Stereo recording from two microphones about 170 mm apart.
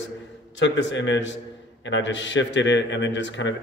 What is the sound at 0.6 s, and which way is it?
A man's voice, 90° left.